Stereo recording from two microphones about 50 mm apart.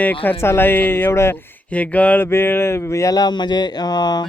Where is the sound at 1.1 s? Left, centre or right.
Left.